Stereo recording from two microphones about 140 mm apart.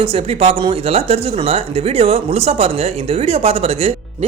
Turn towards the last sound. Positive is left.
turn(degrees=-45)  # may be behind; listen again after turning